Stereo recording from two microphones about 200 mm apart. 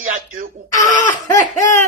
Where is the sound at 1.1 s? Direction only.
15° left (ahead or behind).